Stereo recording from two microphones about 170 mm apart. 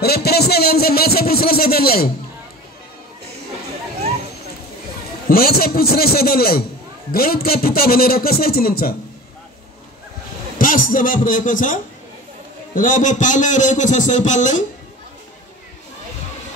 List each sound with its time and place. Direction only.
0.0 s music: 70° left (ahead or behind)
5.3 s a man's voice: 60° left (ahead or behind)
10.6 s a man's voice: 55° left (ahead or behind)